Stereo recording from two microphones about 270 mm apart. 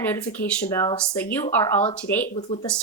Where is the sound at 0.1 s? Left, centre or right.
Centre.